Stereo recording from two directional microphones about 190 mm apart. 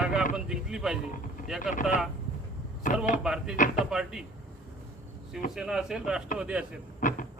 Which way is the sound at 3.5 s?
45° left (ahead or behind).